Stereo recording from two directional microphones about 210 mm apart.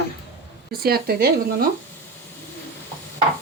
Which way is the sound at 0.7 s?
45° right (ahead or behind).